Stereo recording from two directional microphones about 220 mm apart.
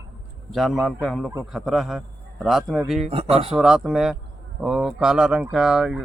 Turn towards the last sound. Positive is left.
turn(degrees=0)  # may be behind; listen again after turning